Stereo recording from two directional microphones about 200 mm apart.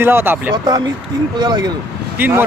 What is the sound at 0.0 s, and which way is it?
Speech, 10° right (ahead or behind).